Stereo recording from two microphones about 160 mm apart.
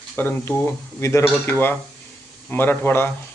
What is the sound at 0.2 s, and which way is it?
Speech, 15° left (ahead or behind).